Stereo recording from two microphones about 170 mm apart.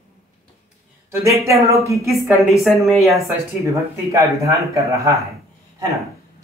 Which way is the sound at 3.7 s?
20° right (ahead or behind).